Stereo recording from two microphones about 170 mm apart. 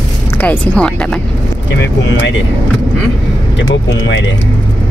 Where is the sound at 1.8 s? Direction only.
90° left.